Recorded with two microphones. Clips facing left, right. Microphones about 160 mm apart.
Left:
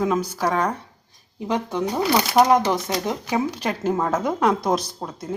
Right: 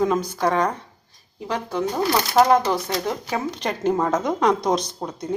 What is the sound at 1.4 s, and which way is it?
Speech, 20° left (ahead or behind).